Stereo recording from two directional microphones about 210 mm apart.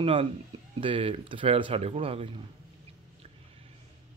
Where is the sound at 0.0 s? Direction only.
25° right (ahead or behind).